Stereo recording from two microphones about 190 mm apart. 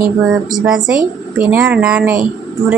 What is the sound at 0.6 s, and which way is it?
Speech, 5° right (ahead or behind).